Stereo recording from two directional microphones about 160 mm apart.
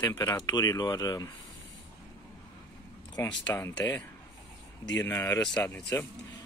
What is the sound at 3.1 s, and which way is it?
Speech, 20° left (ahead or behind).